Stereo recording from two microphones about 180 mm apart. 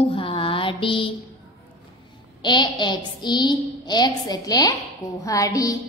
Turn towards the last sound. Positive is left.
turn(degrees=20)  # may be behind; listen again after turning